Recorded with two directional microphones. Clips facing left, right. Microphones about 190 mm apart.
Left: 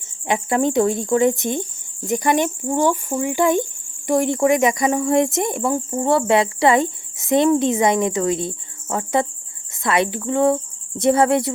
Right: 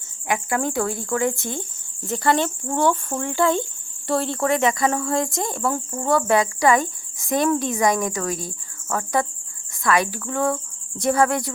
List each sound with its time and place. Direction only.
0.3 s speech: 25° left (ahead or behind)